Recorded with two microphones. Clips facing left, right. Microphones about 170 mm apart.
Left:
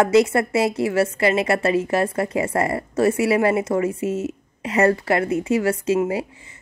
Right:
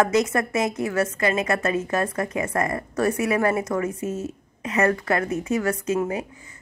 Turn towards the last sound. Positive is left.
turn(degrees=30)  # may be behind; listen again after turning